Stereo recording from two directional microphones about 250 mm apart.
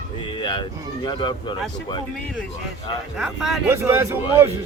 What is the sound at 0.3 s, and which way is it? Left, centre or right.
Speech, centre.